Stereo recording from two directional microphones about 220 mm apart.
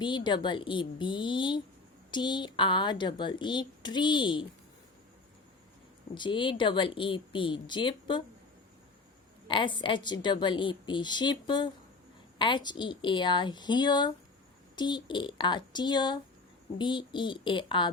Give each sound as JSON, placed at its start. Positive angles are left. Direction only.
{"t": 0.0, "sound": "speech", "side_deg": 20}
{"t": 6.1, "sound": "speech", "side_deg": 20}
{"t": 9.5, "sound": "speech", "side_deg": 20}